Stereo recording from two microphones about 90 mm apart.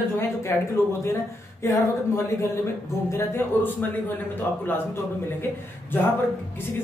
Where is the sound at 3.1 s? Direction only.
25° left (ahead or behind).